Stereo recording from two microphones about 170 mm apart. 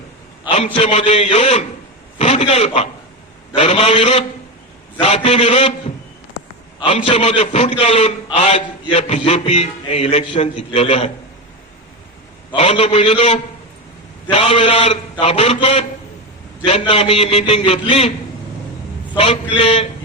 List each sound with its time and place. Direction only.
0.4 s a man's voice: 35° left (ahead or behind)
6.7 s a man's voice: 35° left (ahead or behind)
12.5 s a man's voice: 35° left (ahead or behind)
19.1 s a man's voice: 30° left (ahead or behind)